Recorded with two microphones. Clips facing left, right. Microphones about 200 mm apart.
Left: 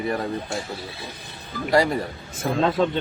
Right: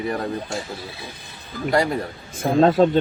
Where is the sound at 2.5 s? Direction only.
45° right (ahead or behind).